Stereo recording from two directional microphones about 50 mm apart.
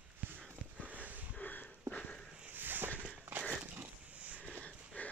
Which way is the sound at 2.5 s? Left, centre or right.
Right.